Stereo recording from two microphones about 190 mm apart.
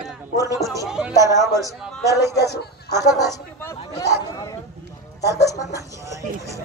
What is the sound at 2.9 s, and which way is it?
Speech, 20° left (ahead or behind).